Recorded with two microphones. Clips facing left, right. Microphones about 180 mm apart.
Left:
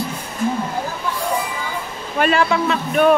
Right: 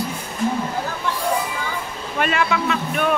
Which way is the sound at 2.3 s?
35° left (ahead or behind).